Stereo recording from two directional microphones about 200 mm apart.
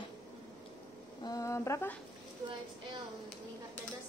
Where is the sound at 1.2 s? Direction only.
15° left (ahead or behind).